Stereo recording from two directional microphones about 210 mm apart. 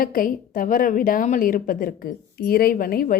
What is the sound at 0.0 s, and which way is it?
A woman's voice, 40° left (ahead or behind).